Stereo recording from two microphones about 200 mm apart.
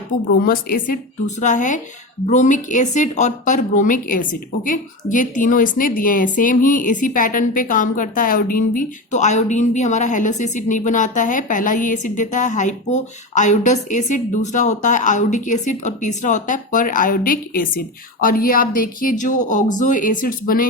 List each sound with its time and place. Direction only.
0.4 s a woman's voice: 45° left (ahead or behind)